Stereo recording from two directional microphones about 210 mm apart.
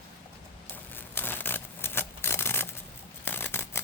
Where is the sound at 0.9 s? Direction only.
10° left (ahead or behind).